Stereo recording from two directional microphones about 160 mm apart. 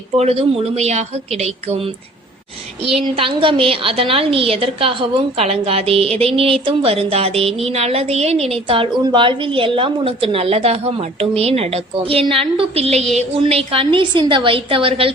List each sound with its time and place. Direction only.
0.2 s a woman's voice: 40° right (ahead or behind)